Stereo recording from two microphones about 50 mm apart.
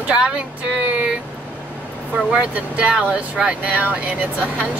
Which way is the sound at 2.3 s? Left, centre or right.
Right.